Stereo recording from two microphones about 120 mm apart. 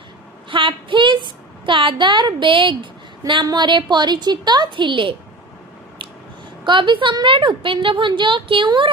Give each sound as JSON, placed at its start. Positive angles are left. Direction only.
{"t": 0.5, "sound": "a woman's voice", "side_deg": -45}
{"t": 6.7, "sound": "a woman's voice", "side_deg": -40}